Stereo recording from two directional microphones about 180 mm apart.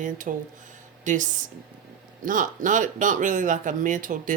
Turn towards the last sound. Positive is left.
turn(degrees=-45)  # may be behind; listen again after turning